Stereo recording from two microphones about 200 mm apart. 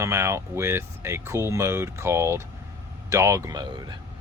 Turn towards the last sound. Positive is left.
turn(degrees=-20)  # may be behind; listen again after turning